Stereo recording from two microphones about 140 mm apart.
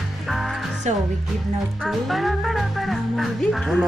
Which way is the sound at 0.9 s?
55° right (ahead or behind).